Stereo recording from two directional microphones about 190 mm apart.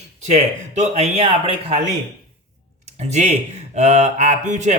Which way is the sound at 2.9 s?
35° right (ahead or behind).